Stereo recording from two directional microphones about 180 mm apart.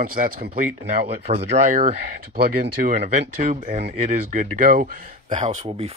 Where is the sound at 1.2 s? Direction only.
35° right (ahead or behind); by 5.0 s 50° right (ahead or behind).